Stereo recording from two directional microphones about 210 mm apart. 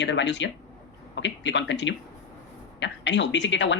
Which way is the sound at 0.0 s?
60° left (ahead or behind).